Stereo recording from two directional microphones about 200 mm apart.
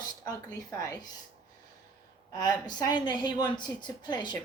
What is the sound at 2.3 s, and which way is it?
A woman's voice, 20° left (ahead or behind).